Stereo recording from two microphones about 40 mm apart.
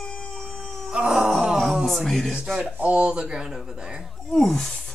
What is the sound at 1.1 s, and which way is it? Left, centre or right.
Groan, centre.